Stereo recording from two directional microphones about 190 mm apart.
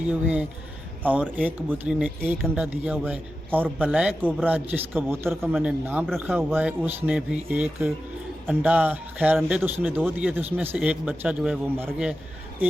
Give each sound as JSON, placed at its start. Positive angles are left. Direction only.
{"t": 0.1, "sound": "speech", "side_deg": -10}